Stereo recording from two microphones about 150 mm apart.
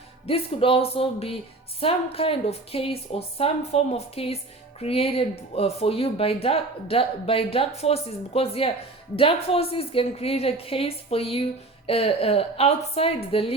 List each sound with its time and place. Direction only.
0.3 s speech: 40° left (ahead or behind)